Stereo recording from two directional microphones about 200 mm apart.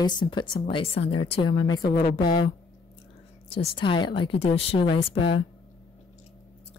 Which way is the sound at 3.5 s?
25° left (ahead or behind).